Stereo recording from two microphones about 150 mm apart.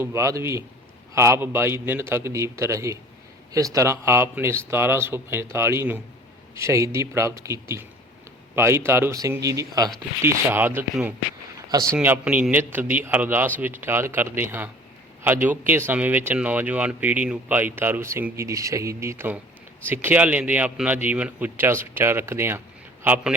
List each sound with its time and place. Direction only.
0.0 s a man's voice: 20° right (ahead or behind)
11.9 s speech: 10° right (ahead or behind)